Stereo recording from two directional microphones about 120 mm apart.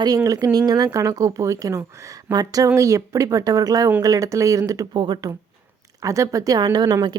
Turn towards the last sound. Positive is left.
turn(degrees=-35)  # may be behind; listen again after turning